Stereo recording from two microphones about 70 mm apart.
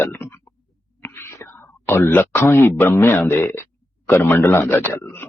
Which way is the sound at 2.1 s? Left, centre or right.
Left.